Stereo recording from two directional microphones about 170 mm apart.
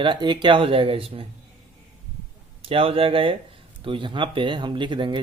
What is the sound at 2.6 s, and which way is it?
Speech, 35° right (ahead or behind).